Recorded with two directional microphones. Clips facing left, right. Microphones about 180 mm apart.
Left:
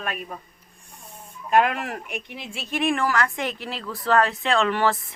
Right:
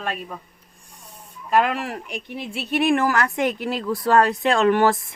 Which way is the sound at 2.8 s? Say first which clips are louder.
Right 3 dB; 40° right (ahead or behind).